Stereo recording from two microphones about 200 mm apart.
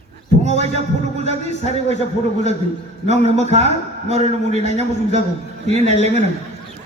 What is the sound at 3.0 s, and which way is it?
A man's voice, 35° right (ahead or behind).